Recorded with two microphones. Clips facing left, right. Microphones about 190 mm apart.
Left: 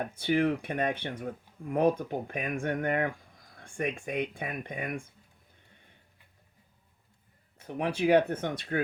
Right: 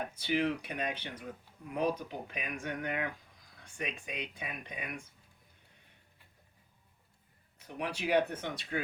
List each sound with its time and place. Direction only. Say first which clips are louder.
0.2 s speech: left 5 dB; 50° left (ahead or behind)
7.8 s speech: left 6 dB; 55° left (ahead or behind)